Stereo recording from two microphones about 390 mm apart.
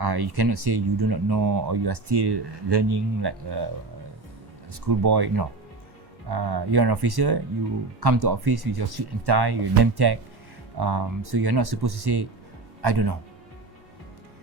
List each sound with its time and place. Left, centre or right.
0.0 s speech: right
1.6 s speech: right
4.7 s speech: right